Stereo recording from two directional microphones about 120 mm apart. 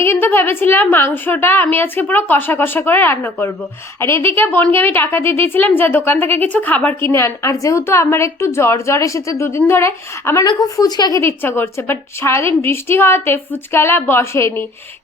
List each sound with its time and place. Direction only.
0.0 s a woman's voice: 20° left (ahead or behind)
10.4 s a woman's voice: 35° left (ahead or behind)
11.2 s a woman's voice: 20° left (ahead or behind)